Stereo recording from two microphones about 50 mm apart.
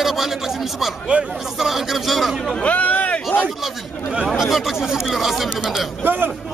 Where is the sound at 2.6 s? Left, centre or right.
Left.